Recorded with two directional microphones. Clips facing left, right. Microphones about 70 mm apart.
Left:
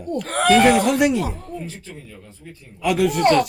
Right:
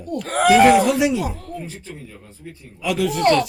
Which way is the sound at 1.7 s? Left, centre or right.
Centre.